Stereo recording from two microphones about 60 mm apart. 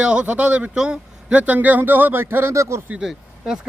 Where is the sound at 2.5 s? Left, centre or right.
Right.